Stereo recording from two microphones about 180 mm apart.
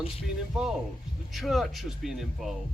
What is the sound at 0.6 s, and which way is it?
Speech, 5° right (ahead or behind).